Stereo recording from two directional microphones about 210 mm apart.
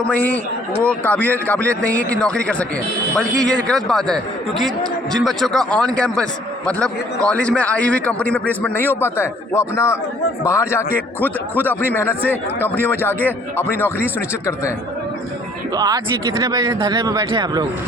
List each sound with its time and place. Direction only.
0.8 s a man's voice: 5° left (ahead or behind)
15.7 s speech: 20° right (ahead or behind)